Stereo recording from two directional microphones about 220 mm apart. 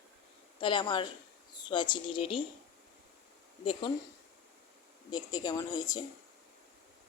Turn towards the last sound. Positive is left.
turn(degrees=15)  # may be behind; listen again after turning